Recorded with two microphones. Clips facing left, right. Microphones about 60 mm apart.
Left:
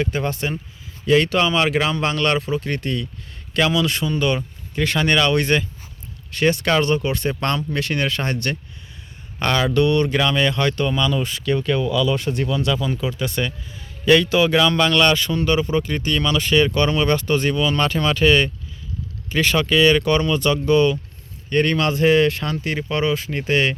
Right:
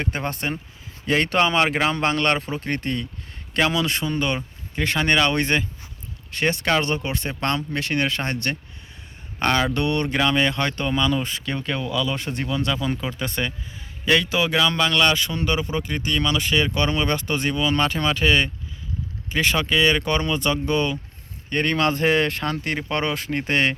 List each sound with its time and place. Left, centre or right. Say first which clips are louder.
0.0 s speech: left 4 dB; right
14.1 s speech: left 5 dB; centre
15.3 s speech: left 5 dB; centre; by 23.7 s right